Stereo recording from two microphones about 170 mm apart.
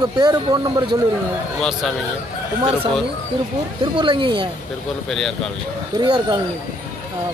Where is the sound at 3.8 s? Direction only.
30° right (ahead or behind).